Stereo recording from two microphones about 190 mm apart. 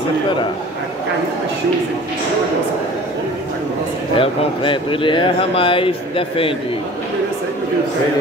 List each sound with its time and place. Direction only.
4.2 s speech: 25° left (ahead or behind)